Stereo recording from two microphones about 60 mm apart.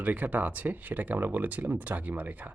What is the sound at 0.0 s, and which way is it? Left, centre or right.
Speech, right.